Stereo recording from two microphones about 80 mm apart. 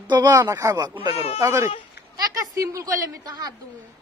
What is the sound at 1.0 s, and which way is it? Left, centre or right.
A woman's voice, right.